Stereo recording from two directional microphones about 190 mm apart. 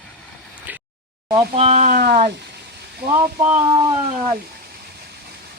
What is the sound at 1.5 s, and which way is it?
Speech, 35° right (ahead or behind).